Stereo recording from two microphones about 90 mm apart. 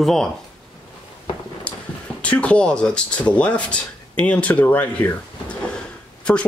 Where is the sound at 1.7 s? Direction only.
15° left (ahead or behind).